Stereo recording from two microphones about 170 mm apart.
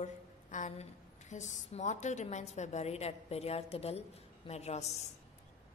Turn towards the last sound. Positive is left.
turn(degrees=40)  # may be behind; listen again after turning